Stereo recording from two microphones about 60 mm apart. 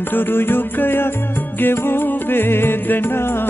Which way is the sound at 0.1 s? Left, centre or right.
Left.